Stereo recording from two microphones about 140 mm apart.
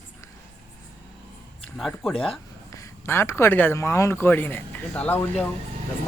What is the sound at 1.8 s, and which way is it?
Speech, centre (ahead or behind).